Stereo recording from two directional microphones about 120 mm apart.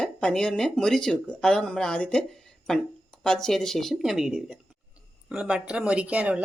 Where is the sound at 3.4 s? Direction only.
5° left (ahead or behind).